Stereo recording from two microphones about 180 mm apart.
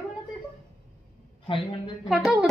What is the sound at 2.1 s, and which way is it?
Speech, 5° right (ahead or behind).